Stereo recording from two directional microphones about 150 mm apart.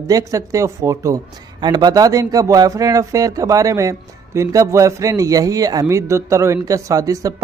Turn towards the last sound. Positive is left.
turn(degrees=-25)  # may be behind; listen again after turning